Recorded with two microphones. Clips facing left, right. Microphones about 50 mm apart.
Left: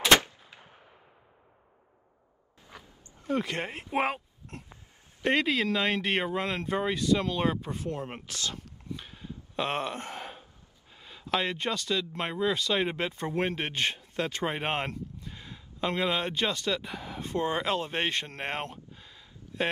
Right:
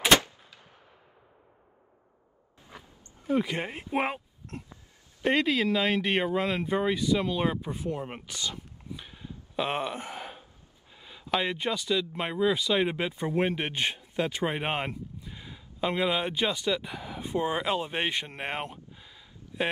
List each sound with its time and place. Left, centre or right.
0.1 s gunshot: left
3.3 s speech: centre
8.9 s gasp: centre
11.0 s speech: centre